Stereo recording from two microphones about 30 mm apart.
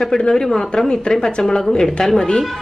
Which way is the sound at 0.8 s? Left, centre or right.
Left.